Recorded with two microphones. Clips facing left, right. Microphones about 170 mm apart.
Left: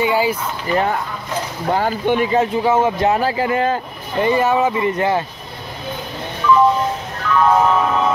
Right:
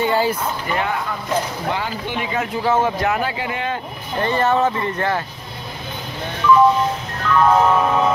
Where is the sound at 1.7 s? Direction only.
45° left (ahead or behind).